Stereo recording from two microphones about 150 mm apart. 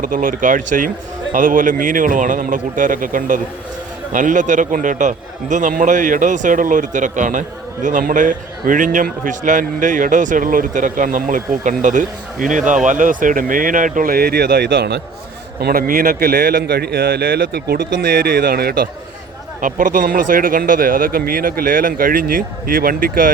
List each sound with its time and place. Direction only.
0.0 s a man's voice: 65° right (ahead or behind); by 15.0 s 90° right
15.6 s a man's voice: 75° right (ahead or behind); by 18.9 s 90° right
19.6 s speech: 60° right (ahead or behind)